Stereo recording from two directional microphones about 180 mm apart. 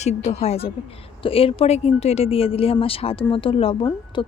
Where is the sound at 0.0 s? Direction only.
40° left (ahead or behind).